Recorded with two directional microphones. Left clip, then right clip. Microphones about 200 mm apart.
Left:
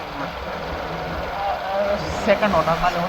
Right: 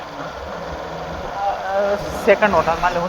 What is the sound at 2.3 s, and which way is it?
Speech, 60° right (ahead or behind).